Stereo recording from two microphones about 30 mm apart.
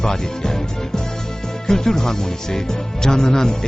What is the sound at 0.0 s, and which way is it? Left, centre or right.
Speech, centre.